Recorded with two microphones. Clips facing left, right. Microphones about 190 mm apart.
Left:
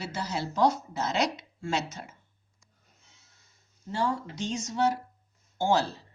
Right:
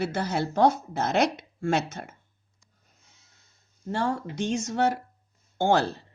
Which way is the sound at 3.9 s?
55° right (ahead or behind).